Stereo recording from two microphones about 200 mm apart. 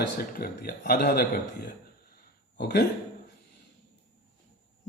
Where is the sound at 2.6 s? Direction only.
55° left (ahead or behind).